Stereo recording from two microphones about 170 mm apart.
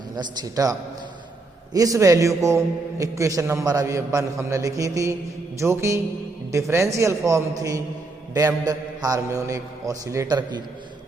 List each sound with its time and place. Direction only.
0.2 s a man's voice: 20° right (ahead or behind)